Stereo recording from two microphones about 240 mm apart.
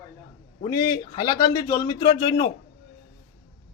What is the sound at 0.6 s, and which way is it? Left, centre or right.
A man's voice, centre.